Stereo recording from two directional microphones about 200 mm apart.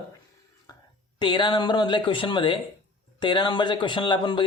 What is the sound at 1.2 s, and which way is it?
A man's voice, 25° left (ahead or behind).